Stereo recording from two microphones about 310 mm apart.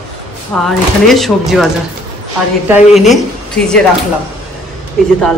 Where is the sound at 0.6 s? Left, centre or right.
Centre.